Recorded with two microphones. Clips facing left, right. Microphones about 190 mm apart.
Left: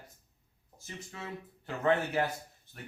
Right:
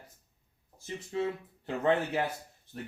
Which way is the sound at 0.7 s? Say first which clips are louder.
Right 11 dB; 30° right (ahead or behind).